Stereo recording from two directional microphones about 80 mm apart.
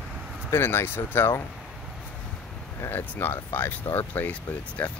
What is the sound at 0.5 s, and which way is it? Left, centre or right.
Speech, left.